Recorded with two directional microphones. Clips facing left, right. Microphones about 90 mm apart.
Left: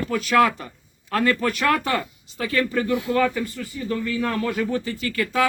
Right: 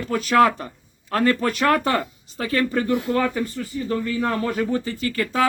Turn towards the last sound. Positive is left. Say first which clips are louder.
# even
turn(degrees=-35)  # may be behind; listen again after turning